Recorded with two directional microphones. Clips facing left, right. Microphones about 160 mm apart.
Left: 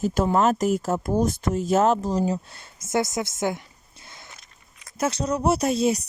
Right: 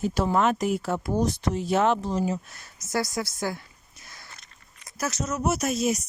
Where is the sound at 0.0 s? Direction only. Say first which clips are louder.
Left 3 dB; 50° left (ahead or behind).